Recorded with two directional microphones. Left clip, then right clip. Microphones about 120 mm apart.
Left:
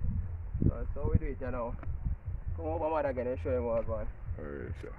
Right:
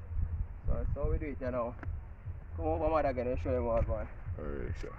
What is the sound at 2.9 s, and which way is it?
Speech, 45° left (ahead or behind).